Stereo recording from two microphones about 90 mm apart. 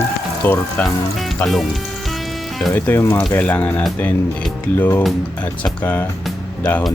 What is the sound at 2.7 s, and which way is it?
Speech, 25° left (ahead or behind).